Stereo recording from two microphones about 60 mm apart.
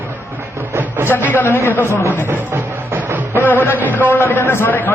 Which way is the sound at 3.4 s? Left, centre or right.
Left.